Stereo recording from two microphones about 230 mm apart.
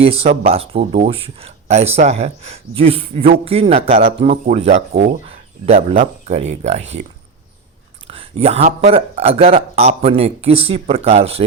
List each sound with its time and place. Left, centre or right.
0.0 s speech: right
8.0 s speech: right